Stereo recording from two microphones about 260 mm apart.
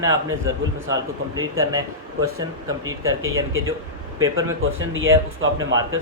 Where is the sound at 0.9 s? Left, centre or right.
Right.